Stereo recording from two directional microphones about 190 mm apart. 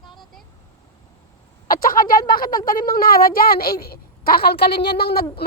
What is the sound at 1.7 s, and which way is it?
Speech, 45° left (ahead or behind).